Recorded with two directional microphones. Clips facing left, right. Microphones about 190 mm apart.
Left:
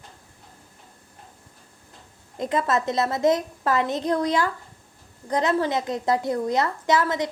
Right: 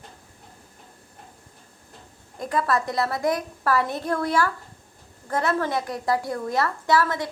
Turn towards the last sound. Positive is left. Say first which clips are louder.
# even
turn(degrees=20)  # may be behind; listen again after turning